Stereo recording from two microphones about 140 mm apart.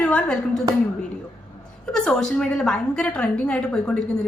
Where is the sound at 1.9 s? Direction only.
5° left (ahead or behind).